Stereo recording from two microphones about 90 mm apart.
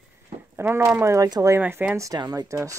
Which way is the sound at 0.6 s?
30° right (ahead or behind).